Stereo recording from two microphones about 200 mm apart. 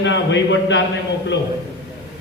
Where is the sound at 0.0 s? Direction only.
65° left (ahead or behind).